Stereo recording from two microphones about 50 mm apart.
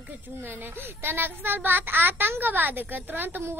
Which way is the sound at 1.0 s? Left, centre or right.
Right.